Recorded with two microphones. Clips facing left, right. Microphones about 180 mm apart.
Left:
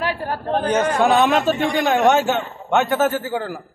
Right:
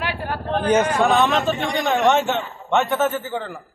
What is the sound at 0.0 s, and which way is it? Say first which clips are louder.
A man's voice: left 3 dB; 40° left (ahead or behind).